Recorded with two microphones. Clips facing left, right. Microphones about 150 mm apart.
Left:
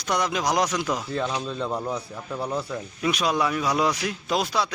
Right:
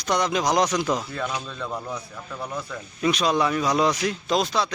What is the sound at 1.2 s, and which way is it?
Speech, 25° left (ahead or behind).